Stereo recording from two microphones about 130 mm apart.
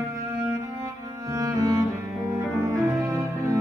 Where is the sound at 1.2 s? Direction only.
25° right (ahead or behind).